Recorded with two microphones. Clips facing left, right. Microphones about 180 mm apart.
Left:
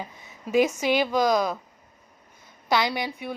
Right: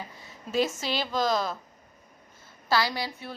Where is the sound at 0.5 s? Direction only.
15° left (ahead or behind).